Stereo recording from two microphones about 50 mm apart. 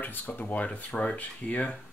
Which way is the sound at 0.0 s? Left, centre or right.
Left.